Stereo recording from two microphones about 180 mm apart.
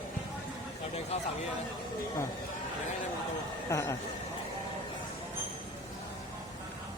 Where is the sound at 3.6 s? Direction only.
15° left (ahead or behind).